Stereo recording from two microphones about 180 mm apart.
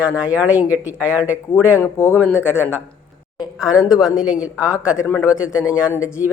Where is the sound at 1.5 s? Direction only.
15° left (ahead or behind).